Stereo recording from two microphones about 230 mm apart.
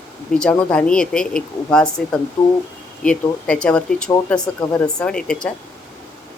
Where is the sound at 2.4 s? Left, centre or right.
Centre.